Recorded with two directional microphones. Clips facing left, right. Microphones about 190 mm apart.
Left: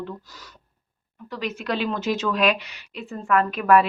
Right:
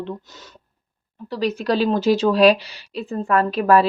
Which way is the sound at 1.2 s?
35° right (ahead or behind).